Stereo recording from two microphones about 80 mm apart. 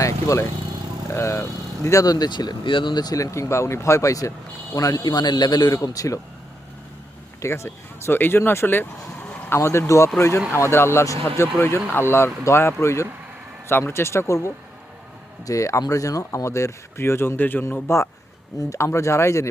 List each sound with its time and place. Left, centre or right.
0.0 s vehicle: left
1.1 s speech: left
3.3 s speech: left
7.4 s speech: left